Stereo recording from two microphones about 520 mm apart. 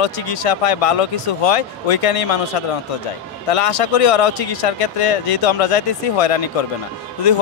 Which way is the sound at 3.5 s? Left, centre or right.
Left.